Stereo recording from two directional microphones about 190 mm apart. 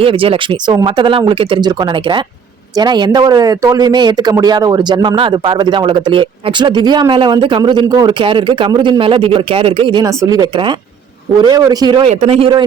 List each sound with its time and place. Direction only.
0.0 s a man's voice: 30° right (ahead or behind)
12.0 s speech: 35° right (ahead or behind)